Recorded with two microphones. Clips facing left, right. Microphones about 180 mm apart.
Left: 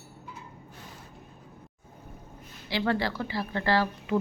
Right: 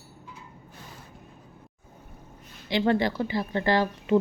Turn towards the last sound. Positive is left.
turn(degrees=-20)  # may be behind; listen again after turning